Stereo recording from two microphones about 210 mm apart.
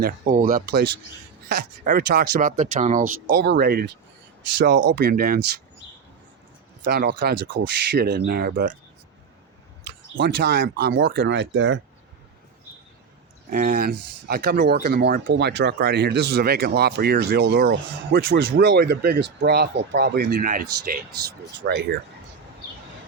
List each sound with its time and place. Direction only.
0.0 s speech: 40° right (ahead or behind)
6.8 s speech: 50° right (ahead or behind)
10.2 s speech: 50° right (ahead or behind)
13.5 s speech: 45° right (ahead or behind)
21.6 s speech: 55° right (ahead or behind)